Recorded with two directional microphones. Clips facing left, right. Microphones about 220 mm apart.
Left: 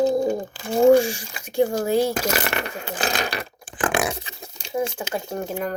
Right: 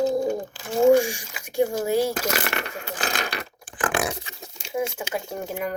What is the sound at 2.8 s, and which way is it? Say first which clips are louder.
Speech: left 3 dB; 30° left (ahead or behind).